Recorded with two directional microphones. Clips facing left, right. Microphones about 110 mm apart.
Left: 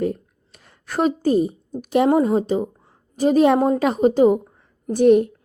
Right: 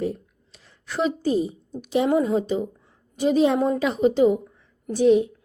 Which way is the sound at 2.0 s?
40° left (ahead or behind).